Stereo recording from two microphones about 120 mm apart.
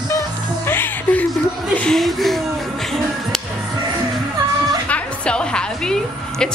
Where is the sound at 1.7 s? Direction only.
5° left (ahead or behind).